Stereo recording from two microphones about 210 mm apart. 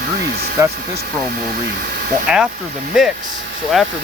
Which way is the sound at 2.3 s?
5° right (ahead or behind).